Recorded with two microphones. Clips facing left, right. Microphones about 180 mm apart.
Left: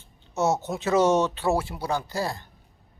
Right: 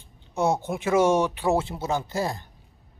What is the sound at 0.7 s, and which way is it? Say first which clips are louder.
A man's voice: even; 10° right (ahead or behind).